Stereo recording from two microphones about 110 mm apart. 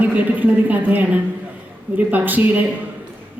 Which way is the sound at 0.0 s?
15° right (ahead or behind).